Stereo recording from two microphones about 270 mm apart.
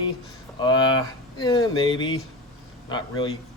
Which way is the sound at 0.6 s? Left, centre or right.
Centre.